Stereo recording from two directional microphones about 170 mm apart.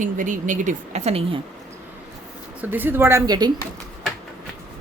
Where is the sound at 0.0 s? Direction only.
50° right (ahead or behind).